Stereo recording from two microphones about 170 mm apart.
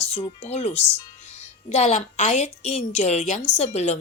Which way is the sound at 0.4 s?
40° left (ahead or behind).